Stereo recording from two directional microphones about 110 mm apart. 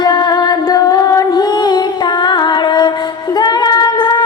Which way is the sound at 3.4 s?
40° left (ahead or behind).